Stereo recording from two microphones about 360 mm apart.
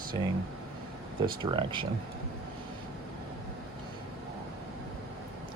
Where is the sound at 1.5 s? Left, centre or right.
Centre.